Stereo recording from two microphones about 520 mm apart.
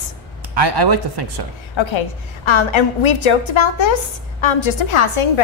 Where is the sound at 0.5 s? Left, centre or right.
Right.